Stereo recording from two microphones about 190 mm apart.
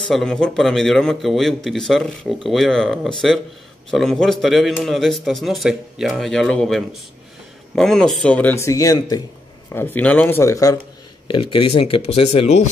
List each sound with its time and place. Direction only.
0.1 s a man's voice: 5° left (ahead or behind); by 12.6 s 35° left (ahead or behind)